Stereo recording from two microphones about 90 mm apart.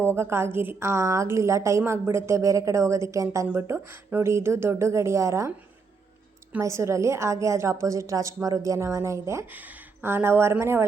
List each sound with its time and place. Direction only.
0.0 s a woman's voice: 30° right (ahead or behind)
3.4 s a woman's voice: 20° right (ahead or behind)
6.6 s a woman's voice: 35° right (ahead or behind)
9.5 s speech: 20° right (ahead or behind)